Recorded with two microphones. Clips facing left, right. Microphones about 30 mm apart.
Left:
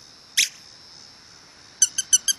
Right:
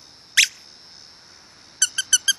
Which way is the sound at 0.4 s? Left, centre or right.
Right.